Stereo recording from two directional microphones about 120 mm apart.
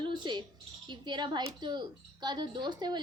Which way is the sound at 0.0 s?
40° right (ahead or behind).